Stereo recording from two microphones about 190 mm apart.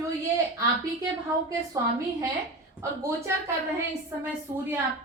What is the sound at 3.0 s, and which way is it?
Speech, 15° right (ahead or behind).